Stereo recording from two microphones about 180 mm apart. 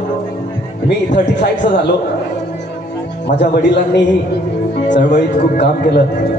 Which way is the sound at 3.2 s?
70° left (ahead or behind).